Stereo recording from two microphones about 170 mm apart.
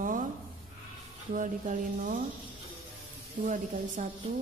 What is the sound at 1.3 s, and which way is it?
Speech, 50° right (ahead or behind).